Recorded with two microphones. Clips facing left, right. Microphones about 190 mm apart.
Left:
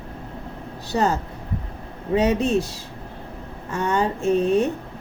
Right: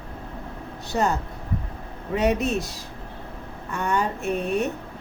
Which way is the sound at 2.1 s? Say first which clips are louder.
Left 3 dB; 30° left (ahead or behind).